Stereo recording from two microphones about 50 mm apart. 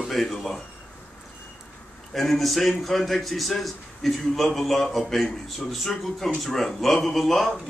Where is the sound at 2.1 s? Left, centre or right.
Centre.